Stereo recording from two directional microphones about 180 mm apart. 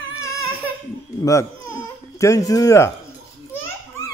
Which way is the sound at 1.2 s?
15° left (ahead or behind).